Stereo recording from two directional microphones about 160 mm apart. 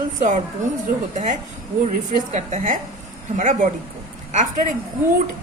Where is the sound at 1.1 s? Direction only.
50° right (ahead or behind).